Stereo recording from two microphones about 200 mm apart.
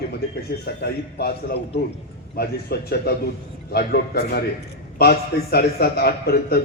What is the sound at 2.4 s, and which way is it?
A man's voice, 55° left (ahead or behind).